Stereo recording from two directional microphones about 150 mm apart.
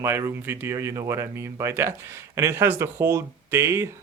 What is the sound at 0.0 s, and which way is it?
Speech, 15° right (ahead or behind).